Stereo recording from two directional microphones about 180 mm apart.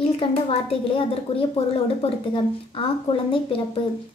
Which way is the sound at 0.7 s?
30° left (ahead or behind).